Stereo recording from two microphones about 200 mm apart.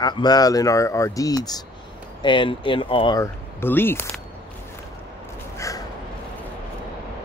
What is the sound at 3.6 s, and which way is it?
Speech, 10° left (ahead or behind).